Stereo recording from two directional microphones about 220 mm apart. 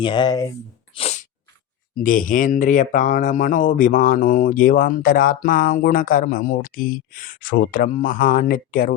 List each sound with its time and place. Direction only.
0.0 s speech: 20° left (ahead or behind)
0.9 s sneeze: 30° left (ahead or behind)
2.0 s speech: 40° left (ahead or behind)